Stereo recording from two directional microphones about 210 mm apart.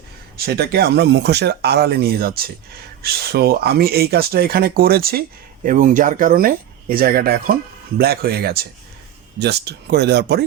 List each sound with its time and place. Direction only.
0.3 s speech: 50° right (ahead or behind)